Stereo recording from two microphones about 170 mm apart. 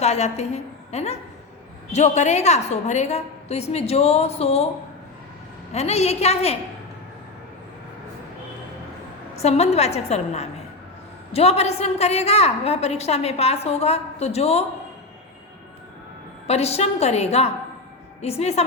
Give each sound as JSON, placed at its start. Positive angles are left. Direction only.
{"t": 0.0, "sound": "a woman's voice", "side_deg": 40}
{"t": 5.7, "sound": "a woman's voice", "side_deg": 40}
{"t": 9.3, "sound": "a woman's voice", "side_deg": 40}
{"t": 16.5, "sound": "a woman's voice", "side_deg": 40}